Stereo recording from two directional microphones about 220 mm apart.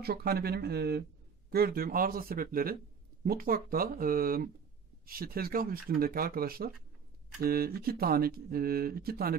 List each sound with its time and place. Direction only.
0.0 s speech: 45° right (ahead or behind)